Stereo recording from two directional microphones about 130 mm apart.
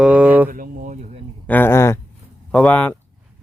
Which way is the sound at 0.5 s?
90° right.